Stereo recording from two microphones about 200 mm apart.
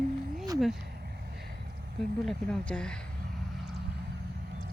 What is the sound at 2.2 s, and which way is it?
Speech, 5° left (ahead or behind).